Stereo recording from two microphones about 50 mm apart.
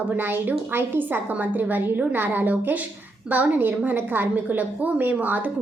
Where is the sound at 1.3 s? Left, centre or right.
Right.